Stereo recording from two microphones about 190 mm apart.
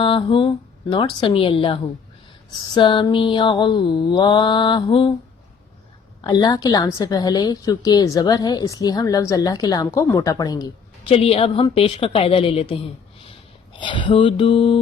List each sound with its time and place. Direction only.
0.0 s a woman's voice: 25° left (ahead or behind)
6.2 s a woman's voice: 20° left (ahead or behind)
11.1 s a woman's voice: 30° left (ahead or behind)